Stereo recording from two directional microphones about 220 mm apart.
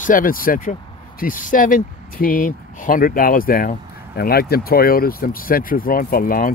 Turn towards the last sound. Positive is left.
turn(degrees=40)  # may be behind; listen again after turning